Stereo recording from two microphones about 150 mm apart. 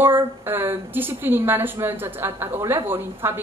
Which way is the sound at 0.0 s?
15° right (ahead or behind).